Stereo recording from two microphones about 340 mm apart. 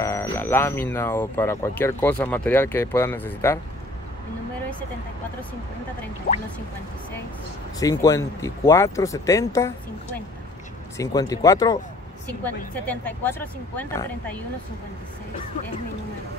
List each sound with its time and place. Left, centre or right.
0.0 s speech: centre
6.3 s speech: left
7.8 s speech: centre
11.0 s speech: centre